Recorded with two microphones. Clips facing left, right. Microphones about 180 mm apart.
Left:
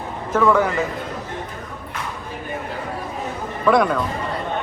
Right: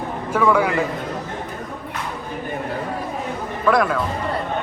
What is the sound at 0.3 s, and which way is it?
Speech, 10° right (ahead or behind).